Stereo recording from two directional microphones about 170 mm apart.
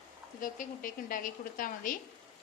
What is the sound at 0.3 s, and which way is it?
A woman's voice, 50° left (ahead or behind).